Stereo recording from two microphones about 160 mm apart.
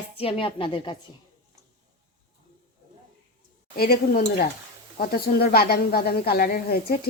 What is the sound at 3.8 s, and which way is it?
Speech, 75° left (ahead or behind).